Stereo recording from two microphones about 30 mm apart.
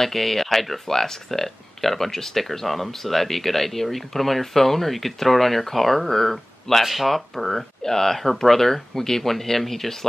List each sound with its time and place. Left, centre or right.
0.0 s speech: centre